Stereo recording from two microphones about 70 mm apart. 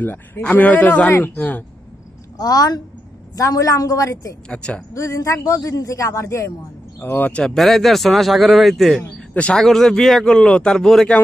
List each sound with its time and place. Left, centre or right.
0.0 s speech: left
2.3 s a woman's voice: left
4.5 s speech: centre
4.9 s a man's voice: left
7.0 s speech: left
7.5 s speech: centre
9.0 s speech: left
9.5 s speech: centre